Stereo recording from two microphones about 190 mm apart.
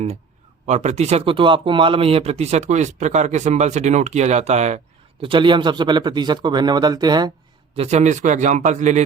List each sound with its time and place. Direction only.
0.7 s speech: 35° right (ahead or behind)
5.2 s speech: 25° right (ahead or behind)
7.8 s speech: 35° right (ahead or behind)